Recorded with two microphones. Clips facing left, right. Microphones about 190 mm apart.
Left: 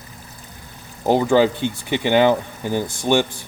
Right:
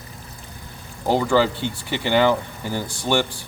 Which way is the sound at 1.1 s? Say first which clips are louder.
Left 3 dB; 20° left (ahead or behind).